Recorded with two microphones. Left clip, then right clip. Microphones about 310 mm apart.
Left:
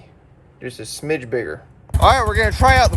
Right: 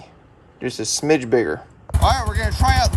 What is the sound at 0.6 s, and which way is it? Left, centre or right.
Speech, centre.